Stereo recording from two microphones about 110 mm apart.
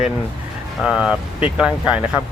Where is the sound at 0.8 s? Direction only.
5° right (ahead or behind).